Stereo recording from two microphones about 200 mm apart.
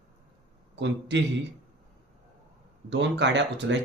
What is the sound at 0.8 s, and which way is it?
Speech, 60° right (ahead or behind).